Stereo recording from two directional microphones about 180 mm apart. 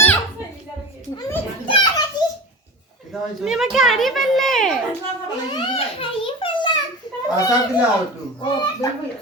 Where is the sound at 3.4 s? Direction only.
Centre (ahead or behind).